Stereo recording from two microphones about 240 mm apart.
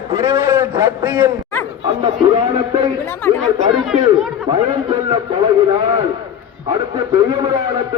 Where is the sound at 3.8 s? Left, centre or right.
Centre.